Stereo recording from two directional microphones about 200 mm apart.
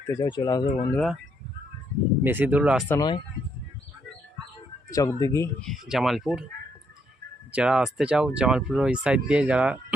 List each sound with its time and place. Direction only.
0.0 s speech: 20° left (ahead or behind)
0.9 s speech: centre (ahead or behind)
2.2 s speech: 10° right (ahead or behind)
2.9 s speech: 20° left (ahead or behind)
4.9 s speech: 15° left (ahead or behind)
5.5 s speech: centre (ahead or behind)
7.5 s speech: 5° right (ahead or behind)